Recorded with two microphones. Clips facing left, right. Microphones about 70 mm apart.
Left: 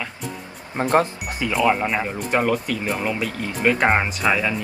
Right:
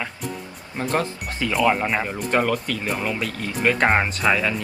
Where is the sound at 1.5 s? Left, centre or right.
Centre.